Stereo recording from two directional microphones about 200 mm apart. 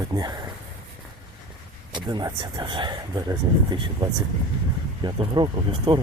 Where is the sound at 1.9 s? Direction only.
20° right (ahead or behind).